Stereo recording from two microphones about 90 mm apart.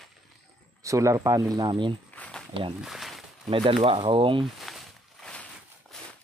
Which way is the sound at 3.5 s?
90° right.